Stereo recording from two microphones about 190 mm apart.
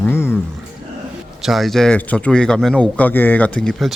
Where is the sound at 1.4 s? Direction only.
Centre (ahead or behind).